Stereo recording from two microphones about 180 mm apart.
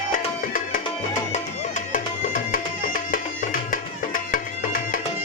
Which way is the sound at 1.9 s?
50° left (ahead or behind).